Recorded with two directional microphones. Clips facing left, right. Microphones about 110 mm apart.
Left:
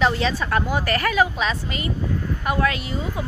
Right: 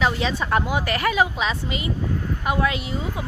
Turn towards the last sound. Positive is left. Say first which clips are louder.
# even
turn(degrees=-20)  # may be behind; listen again after turning